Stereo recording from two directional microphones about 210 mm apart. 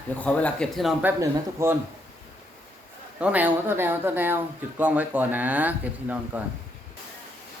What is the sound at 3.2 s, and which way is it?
Speech, 5° right (ahead or behind).